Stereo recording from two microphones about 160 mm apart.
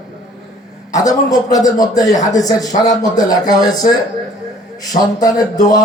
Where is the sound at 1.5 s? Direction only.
20° left (ahead or behind).